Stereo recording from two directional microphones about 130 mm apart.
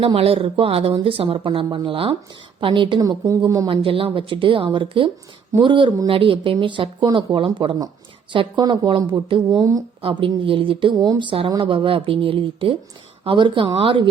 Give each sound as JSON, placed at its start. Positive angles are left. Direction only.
{"t": 0.0, "sound": "speech", "side_deg": -45}
{"t": 3.7, "sound": "speech", "side_deg": -45}
{"t": 10.0, "sound": "speech", "side_deg": -40}
{"t": 10.9, "sound": "speech", "side_deg": -30}